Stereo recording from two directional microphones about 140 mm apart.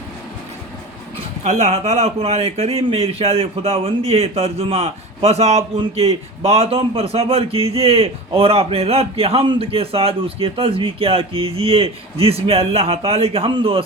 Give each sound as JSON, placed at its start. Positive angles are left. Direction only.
{"t": 1.5, "sound": "speech", "side_deg": -50}